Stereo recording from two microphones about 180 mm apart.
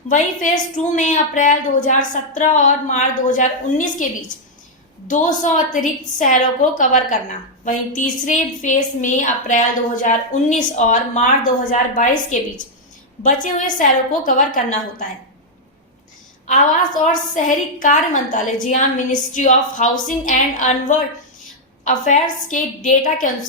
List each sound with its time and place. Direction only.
0.8 s a woman's voice: 45° left (ahead or behind)
5.0 s a woman's voice: 45° left (ahead or behind)
16.5 s a woman's voice: 45° left (ahead or behind)